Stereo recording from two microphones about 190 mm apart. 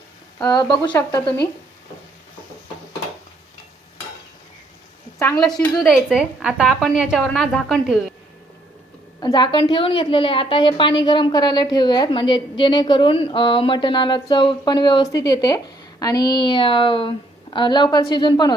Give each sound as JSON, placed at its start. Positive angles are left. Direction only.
{"t": 0.3, "sound": "a woman's voice", "side_deg": 20}
{"t": 5.2, "sound": "a woman's voice", "side_deg": 0}
{"t": 9.2, "sound": "a woman's voice", "side_deg": 25}